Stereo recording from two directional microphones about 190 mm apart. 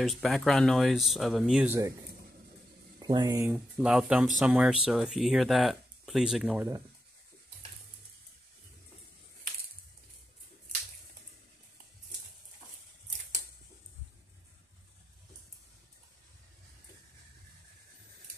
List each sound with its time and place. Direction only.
0.0 s speech: centre (ahead or behind)
3.0 s speech: 25° right (ahead or behind)
3.4 s speech: 5° right (ahead or behind)